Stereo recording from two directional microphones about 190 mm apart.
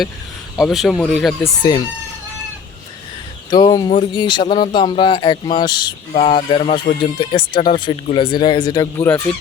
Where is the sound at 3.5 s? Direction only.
20° left (ahead or behind).